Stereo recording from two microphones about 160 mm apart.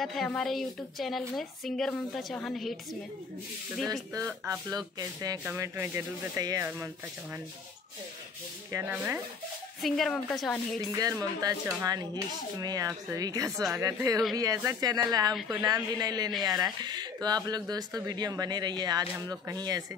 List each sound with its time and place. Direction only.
0.0 s a woman's voice: centre (ahead or behind)
3.9 s speech: 20° right (ahead or behind)
5.4 s speech: 15° right (ahead or behind)
8.7 s speech: 10° right (ahead or behind)
9.8 s a woman's voice: centre (ahead or behind)
10.8 s speech: 20° right (ahead or behind)